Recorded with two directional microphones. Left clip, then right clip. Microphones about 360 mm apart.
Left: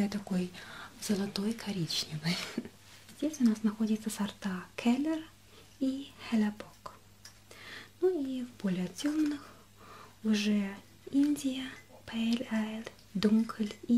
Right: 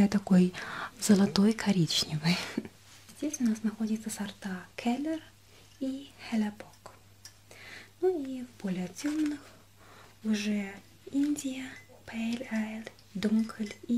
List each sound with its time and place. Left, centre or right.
0.0 s speech: right
3.2 s speech: centre
7.6 s a sound: centre
8.5 s speech: centre
10.4 s speech: centre